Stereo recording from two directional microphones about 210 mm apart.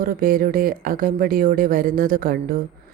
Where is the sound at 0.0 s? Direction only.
40° right (ahead or behind).